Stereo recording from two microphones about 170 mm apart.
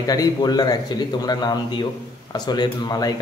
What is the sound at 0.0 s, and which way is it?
A man's voice, 20° left (ahead or behind).